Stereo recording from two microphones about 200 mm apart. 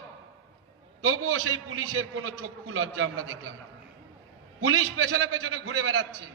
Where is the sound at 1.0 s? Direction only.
90° right.